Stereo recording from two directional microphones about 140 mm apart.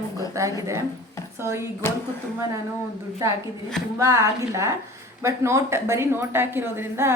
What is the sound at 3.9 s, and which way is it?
A woman's voice, 20° right (ahead or behind).